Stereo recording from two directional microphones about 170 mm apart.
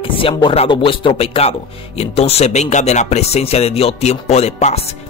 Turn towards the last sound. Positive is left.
turn(degrees=40)  # may be behind; listen again after turning